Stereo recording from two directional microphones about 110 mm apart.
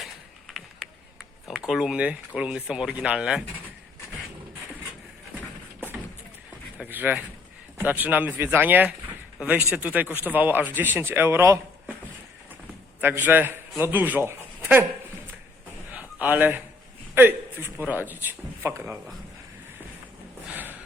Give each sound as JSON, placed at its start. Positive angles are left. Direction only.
{"t": 0.0, "sound": "a sound", "side_deg": 0}
{"t": 6.8, "sound": "speech", "side_deg": -15}
{"t": 13.0, "sound": "a man's voice", "side_deg": -15}
{"t": 15.9, "sound": "a sound", "side_deg": -15}
{"t": 17.2, "sound": "a man's voice", "side_deg": -20}
{"t": 20.5, "sound": "snort", "side_deg": -15}